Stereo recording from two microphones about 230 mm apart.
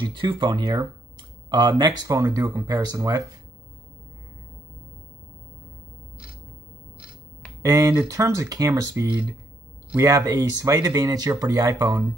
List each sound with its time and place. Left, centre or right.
0.0 s speech: right
7.6 s speech: centre
9.9 s speech: centre